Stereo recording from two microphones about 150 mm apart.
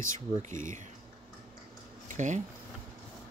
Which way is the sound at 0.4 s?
55° right (ahead or behind).